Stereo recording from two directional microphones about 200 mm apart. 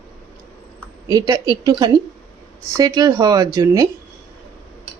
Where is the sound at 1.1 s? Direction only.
20° right (ahead or behind).